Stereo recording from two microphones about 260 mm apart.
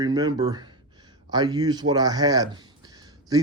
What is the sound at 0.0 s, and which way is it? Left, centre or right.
Speech, centre.